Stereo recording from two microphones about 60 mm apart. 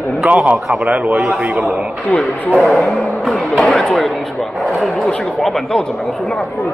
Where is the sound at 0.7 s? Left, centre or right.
Right.